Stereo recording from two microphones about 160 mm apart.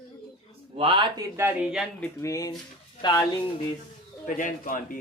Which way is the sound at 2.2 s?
20° left (ahead or behind).